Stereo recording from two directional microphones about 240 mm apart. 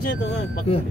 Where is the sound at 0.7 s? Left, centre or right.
Left.